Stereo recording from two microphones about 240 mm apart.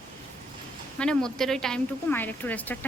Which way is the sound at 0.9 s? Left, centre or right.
Centre.